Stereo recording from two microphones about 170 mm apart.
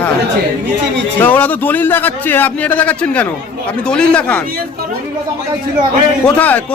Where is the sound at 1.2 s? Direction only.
10° left (ahead or behind).